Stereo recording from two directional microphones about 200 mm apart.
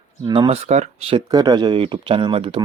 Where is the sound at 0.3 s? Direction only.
25° right (ahead or behind).